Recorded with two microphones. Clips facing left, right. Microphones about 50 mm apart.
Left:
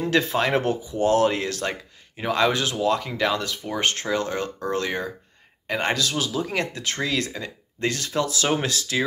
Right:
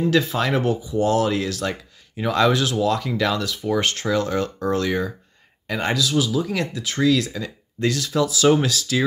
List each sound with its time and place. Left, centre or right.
0.1 s speech: left